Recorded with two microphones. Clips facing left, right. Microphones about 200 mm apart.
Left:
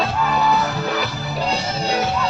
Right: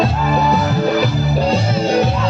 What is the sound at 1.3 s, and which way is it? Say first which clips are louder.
Music: right 4 dB; 40° right (ahead or behind).